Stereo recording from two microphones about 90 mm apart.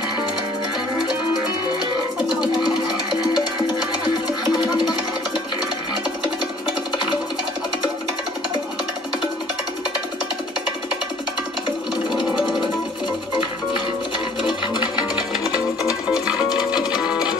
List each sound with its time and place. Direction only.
2.4 s music: 50° left (ahead or behind)
15.8 s music: 5° right (ahead or behind)